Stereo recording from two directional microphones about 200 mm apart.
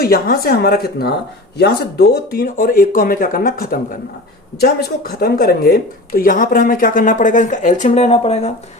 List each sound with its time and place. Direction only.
0.0 s speech: 50° left (ahead or behind); by 8.5 s 30° left (ahead or behind)